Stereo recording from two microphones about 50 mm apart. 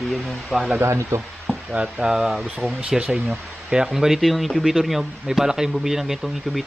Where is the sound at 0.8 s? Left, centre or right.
Right.